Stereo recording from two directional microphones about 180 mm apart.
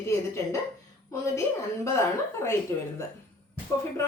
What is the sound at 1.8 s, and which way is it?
Speech, 15° left (ahead or behind).